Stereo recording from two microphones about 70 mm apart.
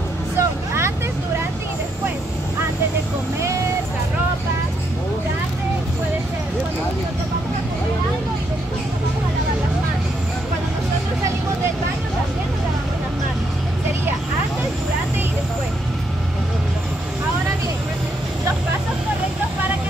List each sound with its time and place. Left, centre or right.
0.4 s vehicle: right